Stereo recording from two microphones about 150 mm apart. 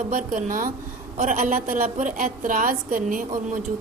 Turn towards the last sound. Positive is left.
turn(degrees=-60)  # may be behind; listen again after turning